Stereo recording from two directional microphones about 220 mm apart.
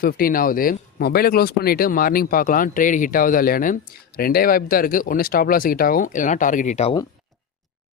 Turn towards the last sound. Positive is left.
turn(degrees=30)  # may be behind; listen again after turning